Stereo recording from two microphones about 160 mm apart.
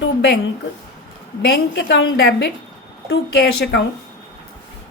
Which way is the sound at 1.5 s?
85° left.